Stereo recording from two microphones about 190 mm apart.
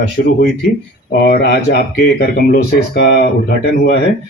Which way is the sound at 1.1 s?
55° left (ahead or behind).